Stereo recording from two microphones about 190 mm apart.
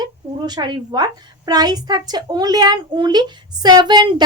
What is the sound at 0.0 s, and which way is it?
A woman's voice, 20° right (ahead or behind).